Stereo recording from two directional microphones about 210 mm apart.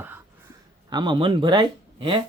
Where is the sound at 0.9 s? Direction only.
20° right (ahead or behind).